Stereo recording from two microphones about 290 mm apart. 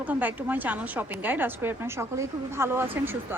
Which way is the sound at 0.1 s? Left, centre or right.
Centre.